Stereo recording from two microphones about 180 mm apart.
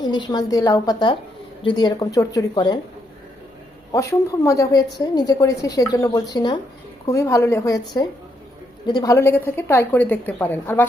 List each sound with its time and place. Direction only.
0.0 s a woman's voice: 25° left (ahead or behind)
3.9 s a woman's voice: 15° left (ahead or behind)